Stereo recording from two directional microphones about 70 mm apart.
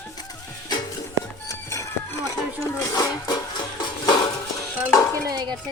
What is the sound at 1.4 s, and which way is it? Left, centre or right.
Music, left.